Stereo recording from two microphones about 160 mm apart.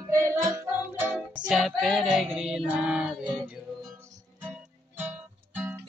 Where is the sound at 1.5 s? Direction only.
Centre (ahead or behind).